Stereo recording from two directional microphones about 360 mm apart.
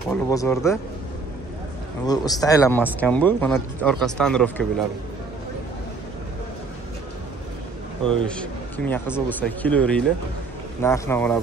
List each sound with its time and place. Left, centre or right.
0.1 s speech: centre
2.0 s speech: centre
8.0 s speech: centre